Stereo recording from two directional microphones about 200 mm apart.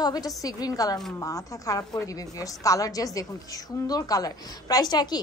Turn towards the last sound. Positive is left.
turn(degrees=20)  # may be behind; listen again after turning